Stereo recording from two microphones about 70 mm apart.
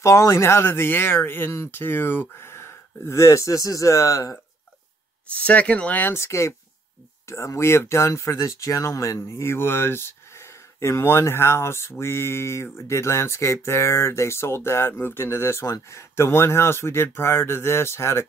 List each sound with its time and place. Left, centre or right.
0.0 s speech: left
5.3 s speech: centre
6.1 s speech: left